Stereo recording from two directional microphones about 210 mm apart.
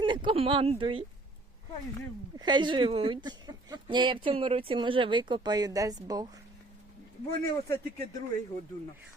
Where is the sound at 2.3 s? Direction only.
20° right (ahead or behind).